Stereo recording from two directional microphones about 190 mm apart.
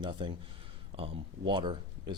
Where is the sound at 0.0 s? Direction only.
25° right (ahead or behind).